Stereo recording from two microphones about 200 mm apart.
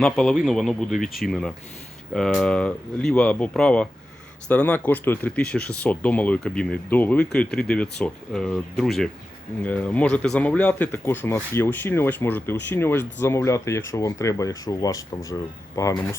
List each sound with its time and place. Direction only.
0.0 s speech: centre (ahead or behind)